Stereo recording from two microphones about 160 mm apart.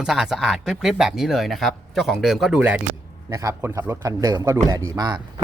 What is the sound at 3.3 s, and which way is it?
Speech, 20° right (ahead or behind).